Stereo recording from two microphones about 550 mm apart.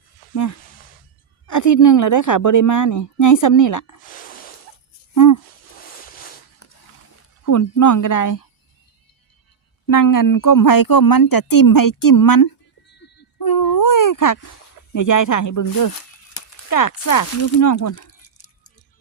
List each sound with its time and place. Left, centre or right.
1.5 s speech: left
4.1 s a sound: centre
5.1 s speech: left
6.0 s a sound: centre
7.4 s speech: left
9.8 s speech: left
13.4 s baby cry: left
14.9 s speech: left